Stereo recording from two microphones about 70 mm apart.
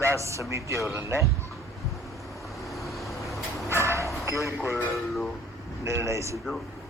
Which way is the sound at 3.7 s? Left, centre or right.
Right.